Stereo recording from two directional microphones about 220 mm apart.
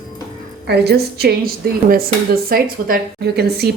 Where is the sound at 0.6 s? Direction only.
50° right (ahead or behind).